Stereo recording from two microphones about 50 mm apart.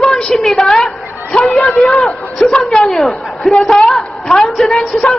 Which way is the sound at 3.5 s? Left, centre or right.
Left.